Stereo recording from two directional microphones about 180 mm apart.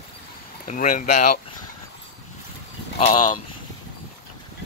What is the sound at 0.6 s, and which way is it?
Speech, 45° left (ahead or behind).